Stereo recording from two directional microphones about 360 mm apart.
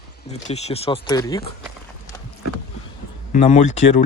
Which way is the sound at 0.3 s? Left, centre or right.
Centre.